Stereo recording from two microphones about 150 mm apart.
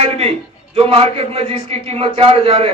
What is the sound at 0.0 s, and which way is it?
A man's voice, 45° right (ahead or behind).